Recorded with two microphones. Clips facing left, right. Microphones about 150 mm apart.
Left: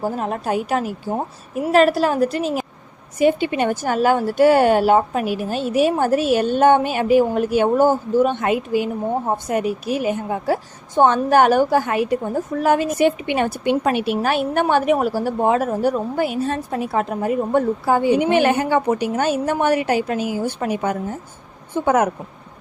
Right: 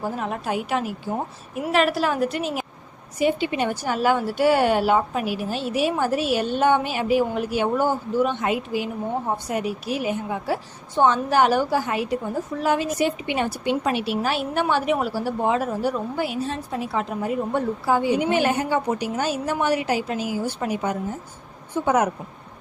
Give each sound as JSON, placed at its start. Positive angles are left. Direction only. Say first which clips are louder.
{"t": 0.0, "sound": "a woman's voice", "louder": "left 4 dB", "side_deg": 40}
{"t": 3.2, "sound": "a woman's voice", "louder": "left 5 dB", "side_deg": 50}